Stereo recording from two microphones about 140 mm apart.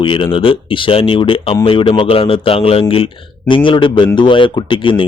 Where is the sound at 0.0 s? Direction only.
40° left (ahead or behind).